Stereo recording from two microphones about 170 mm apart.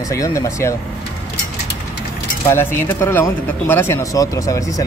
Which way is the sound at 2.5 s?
15° left (ahead or behind).